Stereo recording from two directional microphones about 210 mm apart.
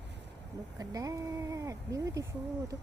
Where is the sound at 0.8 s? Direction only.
15° right (ahead or behind).